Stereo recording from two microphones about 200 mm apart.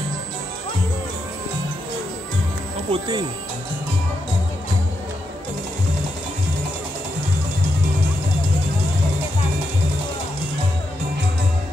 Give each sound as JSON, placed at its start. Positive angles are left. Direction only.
{"t": 2.9, "sound": "speech", "side_deg": -20}